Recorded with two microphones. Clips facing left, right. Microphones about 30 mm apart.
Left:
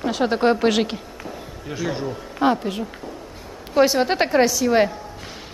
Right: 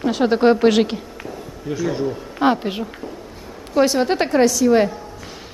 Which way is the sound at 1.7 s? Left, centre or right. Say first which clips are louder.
Right 4 dB; centre.